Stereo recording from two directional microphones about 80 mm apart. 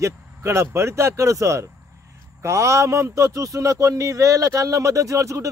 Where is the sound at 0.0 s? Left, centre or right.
Right.